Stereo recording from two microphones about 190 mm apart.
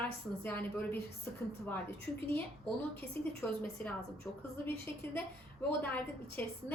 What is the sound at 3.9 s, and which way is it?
A woman's voice, 10° left (ahead or behind).